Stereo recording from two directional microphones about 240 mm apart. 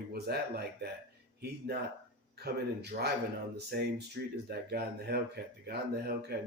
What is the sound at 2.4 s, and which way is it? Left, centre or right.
Speech, right.